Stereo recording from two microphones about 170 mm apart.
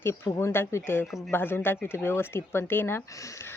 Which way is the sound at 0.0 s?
15° left (ahead or behind).